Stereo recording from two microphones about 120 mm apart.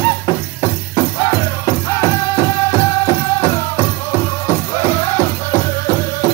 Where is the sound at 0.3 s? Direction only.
30° left (ahead or behind).